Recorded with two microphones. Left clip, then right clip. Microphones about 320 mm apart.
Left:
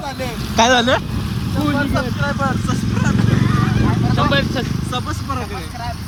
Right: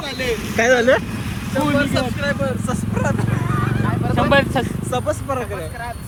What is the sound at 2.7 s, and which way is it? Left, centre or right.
Speech, centre.